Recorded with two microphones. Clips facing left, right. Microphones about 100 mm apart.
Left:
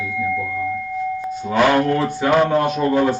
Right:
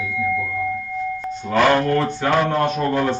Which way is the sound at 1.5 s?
5° left (ahead or behind).